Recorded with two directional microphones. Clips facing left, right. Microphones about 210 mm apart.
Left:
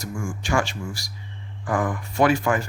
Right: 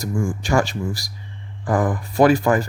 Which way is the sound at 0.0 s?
35° right (ahead or behind).